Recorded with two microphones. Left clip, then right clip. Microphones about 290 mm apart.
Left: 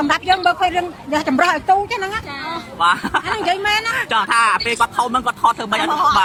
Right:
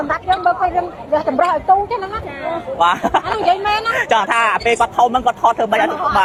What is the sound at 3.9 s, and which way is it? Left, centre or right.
Speech, centre.